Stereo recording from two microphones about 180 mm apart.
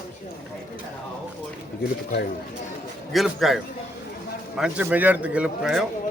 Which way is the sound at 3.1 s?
Centre (ahead or behind).